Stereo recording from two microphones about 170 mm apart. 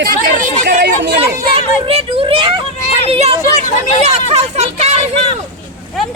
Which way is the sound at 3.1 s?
35° right (ahead or behind).